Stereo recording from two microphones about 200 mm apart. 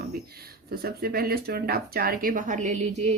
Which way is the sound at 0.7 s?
50° right (ahead or behind).